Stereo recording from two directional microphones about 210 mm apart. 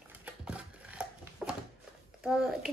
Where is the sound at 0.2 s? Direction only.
5° right (ahead or behind).